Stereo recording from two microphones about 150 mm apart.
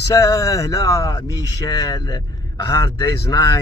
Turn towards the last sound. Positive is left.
turn(degrees=25)  # may be behind; listen again after turning